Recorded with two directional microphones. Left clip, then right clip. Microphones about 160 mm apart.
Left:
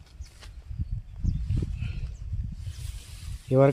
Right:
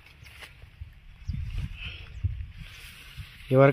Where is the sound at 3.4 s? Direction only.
5° left (ahead or behind).